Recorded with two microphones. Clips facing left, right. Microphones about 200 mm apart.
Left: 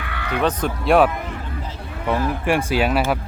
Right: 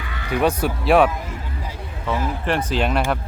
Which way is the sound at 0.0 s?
60° left (ahead or behind).